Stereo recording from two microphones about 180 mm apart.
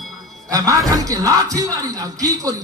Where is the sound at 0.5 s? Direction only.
20° right (ahead or behind).